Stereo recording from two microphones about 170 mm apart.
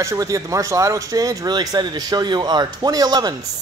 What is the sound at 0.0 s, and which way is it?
Speech, 20° right (ahead or behind).